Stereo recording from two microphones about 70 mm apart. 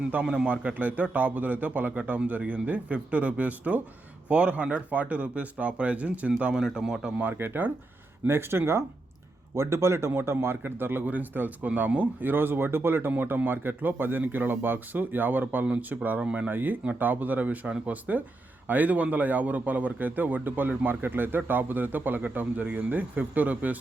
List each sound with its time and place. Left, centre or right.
0.1 s a man's voice: centre
7.2 s speech: right
15.6 s a man's voice: centre
16.5 s speech: right